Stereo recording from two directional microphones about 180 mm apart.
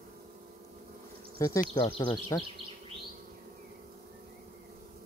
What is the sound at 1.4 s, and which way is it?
Speech, 20° left (ahead or behind).